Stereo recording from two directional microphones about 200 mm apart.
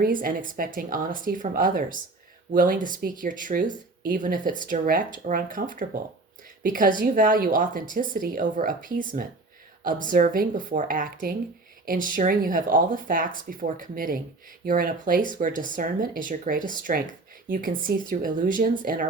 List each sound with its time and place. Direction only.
0.0 s speech: 45° right (ahead or behind)